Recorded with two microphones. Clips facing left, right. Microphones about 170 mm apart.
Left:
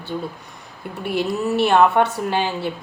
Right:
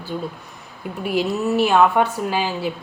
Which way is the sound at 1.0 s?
5° right (ahead or behind).